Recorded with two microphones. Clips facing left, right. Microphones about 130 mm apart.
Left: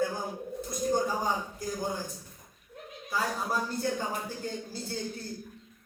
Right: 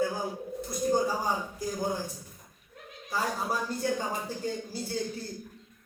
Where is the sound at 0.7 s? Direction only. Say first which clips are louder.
Right 2 dB; 10° right (ahead or behind).